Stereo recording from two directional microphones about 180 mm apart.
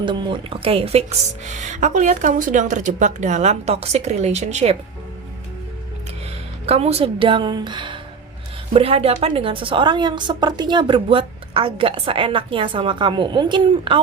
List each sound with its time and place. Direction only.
0.0 s speech: 25° right (ahead or behind)
6.7 s a woman's voice: 35° right (ahead or behind)